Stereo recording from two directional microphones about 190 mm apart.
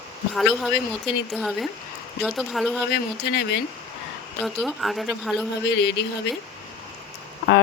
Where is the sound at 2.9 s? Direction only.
60° left (ahead or behind).